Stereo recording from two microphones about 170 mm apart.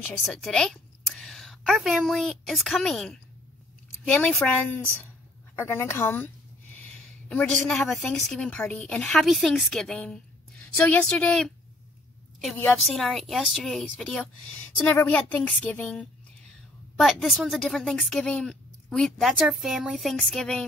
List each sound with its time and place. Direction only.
0.0 s a woman's voice: 5° left (ahead or behind)
5.6 s a woman's voice: 15° left (ahead or behind)
12.8 s a woman's voice: centre (ahead or behind)